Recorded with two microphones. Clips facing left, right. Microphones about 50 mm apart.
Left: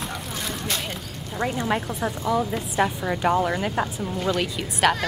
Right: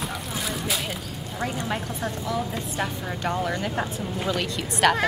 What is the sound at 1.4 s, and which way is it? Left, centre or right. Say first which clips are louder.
A woman's voice: left 4 dB; centre.